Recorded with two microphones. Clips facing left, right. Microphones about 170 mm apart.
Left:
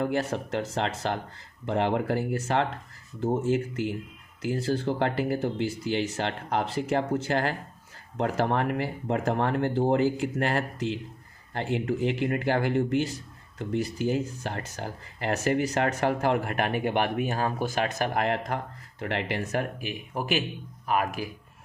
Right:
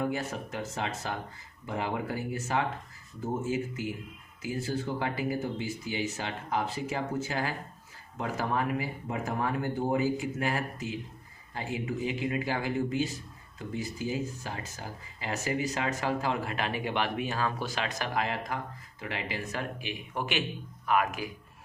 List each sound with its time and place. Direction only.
0.0 s speech: 75° left (ahead or behind); by 21.2 s 40° left (ahead or behind)